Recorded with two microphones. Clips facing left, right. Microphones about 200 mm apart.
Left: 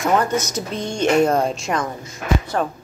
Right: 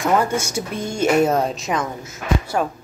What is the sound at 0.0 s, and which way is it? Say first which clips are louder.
Speech: even; 5° right (ahead or behind).